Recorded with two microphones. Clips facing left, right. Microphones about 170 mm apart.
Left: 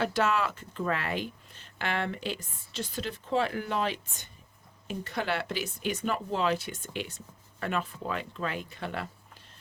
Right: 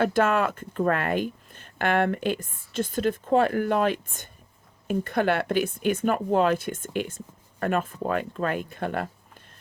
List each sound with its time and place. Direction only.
0.0 s speech: 50° right (ahead or behind)